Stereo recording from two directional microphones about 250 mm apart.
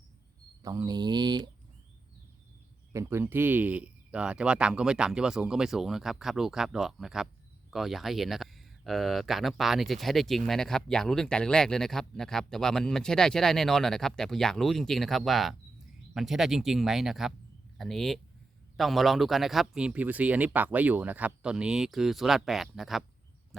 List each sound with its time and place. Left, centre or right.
0.6 s speech: centre
2.9 s speech: centre